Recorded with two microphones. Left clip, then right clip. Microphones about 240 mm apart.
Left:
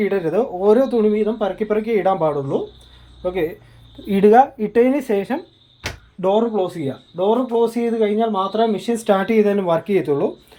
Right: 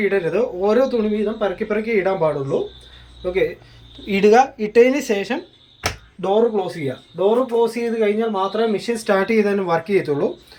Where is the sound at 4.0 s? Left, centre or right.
Left.